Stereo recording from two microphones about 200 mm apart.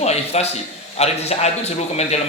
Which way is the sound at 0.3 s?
30° left (ahead or behind).